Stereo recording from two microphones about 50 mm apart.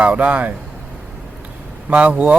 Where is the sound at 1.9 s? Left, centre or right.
Right.